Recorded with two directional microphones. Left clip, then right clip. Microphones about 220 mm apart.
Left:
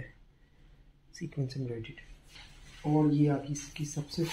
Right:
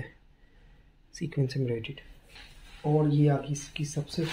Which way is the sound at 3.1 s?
45° right (ahead or behind).